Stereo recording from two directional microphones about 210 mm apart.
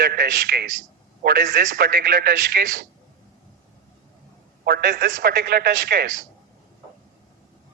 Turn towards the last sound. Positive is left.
turn(degrees=-50)  # may be behind; listen again after turning